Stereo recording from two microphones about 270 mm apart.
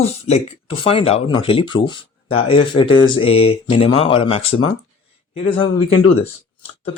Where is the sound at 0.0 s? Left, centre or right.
Left.